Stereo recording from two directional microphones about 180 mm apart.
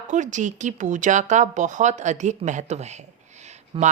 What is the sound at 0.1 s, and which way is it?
Speech, 45° right (ahead or behind).